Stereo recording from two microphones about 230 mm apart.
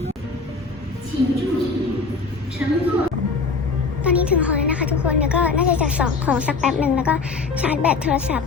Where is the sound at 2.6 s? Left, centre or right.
Centre.